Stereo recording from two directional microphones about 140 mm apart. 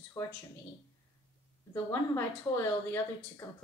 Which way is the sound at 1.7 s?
20° left (ahead or behind).